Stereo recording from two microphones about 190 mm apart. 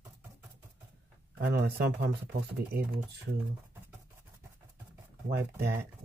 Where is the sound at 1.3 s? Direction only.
55° right (ahead or behind).